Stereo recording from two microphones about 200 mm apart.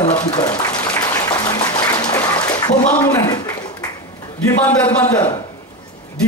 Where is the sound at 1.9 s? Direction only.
20° left (ahead or behind).